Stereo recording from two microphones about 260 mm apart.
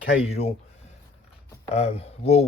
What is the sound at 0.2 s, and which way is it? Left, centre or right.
Speech, left.